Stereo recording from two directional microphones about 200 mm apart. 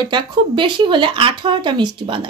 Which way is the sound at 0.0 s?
25° right (ahead or behind).